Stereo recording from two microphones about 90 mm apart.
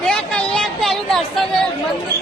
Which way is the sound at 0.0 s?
10° left (ahead or behind).